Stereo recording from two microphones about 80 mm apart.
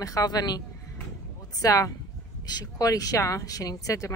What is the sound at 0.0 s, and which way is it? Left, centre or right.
Speech, left.